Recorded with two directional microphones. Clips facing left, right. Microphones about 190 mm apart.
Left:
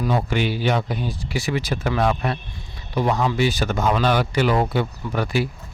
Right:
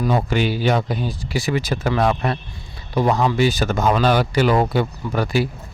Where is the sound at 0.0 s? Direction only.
40° right (ahead or behind).